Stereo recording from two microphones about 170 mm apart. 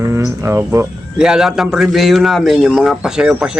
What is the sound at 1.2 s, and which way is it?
A man's voice, 5° right (ahead or behind).